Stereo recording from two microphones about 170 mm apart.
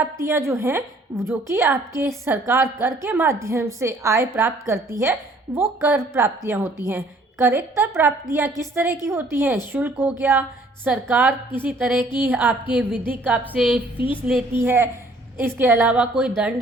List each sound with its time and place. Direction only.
0.0 s a woman's voice: 15° right (ahead or behind)